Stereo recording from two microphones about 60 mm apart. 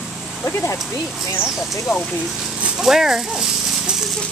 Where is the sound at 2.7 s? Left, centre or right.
Centre.